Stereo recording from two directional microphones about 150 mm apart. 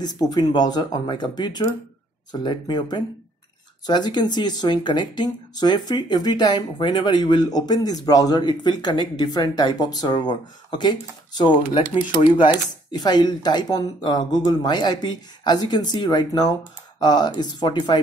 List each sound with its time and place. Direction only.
0.0 s speech: 25° left (ahead or behind)